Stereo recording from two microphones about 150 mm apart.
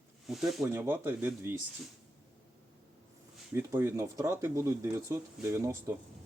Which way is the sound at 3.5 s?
15° right (ahead or behind).